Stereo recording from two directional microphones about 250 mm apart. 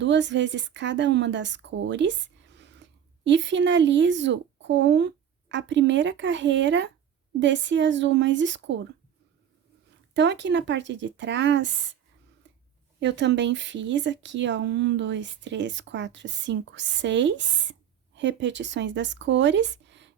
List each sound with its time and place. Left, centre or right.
0.0 s a woman's voice: right
10.2 s speech: right
13.0 s speech: right